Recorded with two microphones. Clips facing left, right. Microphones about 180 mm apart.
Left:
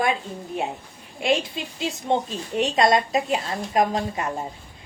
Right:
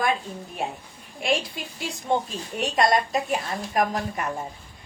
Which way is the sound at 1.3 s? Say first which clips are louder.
Left 3 dB; 25° left (ahead or behind).